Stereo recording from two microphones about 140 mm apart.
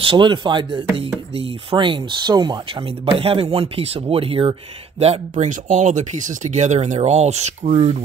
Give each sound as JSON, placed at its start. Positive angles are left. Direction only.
{"t": 0.0, "sound": "speech", "side_deg": -35}
{"t": 3.2, "sound": "speech", "side_deg": -45}